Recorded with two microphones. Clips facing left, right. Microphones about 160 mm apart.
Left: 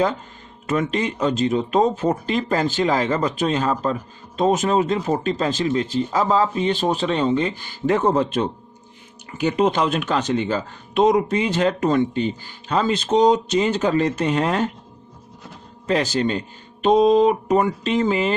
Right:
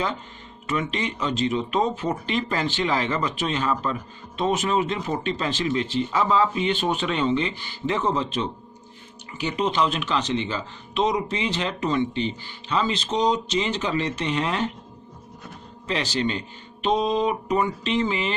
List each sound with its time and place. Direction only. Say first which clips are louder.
0.7 s speech: left 5 dB; 45° left (ahead or behind)
15.9 s speech: left 5 dB; 45° left (ahead or behind)